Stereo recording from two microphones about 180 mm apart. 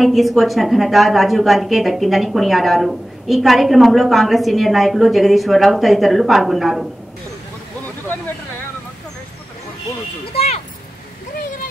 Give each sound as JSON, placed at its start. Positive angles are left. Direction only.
{"t": 0.0, "sound": "a woman's voice", "side_deg": 0}
{"t": 10.2, "sound": "speech", "side_deg": 35}